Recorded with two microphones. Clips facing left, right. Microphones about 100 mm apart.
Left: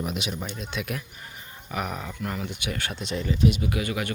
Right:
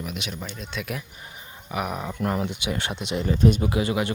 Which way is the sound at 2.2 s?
35° right (ahead or behind).